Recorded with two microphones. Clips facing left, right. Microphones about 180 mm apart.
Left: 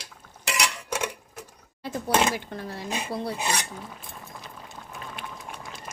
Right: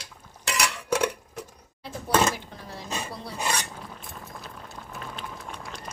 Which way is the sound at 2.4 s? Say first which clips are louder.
Left 6 dB; 65° left (ahead or behind).